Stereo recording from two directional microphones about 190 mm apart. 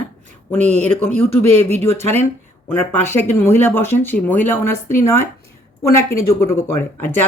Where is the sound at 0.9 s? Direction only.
10° left (ahead or behind).